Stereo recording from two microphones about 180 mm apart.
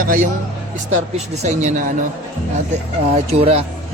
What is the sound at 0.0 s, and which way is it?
Speech, 50° right (ahead or behind).